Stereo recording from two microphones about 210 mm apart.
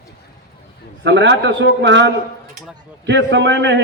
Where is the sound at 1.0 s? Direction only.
55° right (ahead or behind).